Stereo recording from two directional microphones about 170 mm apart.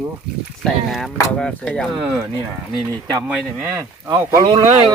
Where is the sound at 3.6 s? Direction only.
10° right (ahead or behind).